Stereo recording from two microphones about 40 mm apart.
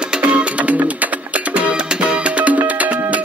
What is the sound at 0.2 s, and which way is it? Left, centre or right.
Music, right.